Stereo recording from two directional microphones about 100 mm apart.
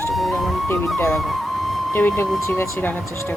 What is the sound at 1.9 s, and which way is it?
Speech, 20° left (ahead or behind).